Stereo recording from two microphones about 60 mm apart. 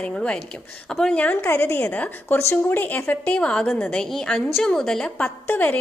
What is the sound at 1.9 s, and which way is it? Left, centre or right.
Speech, left.